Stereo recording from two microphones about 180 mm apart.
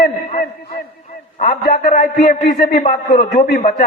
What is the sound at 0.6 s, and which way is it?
Speech, 60° left (ahead or behind).